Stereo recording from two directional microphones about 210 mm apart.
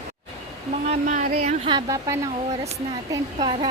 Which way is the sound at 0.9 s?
35° right (ahead or behind).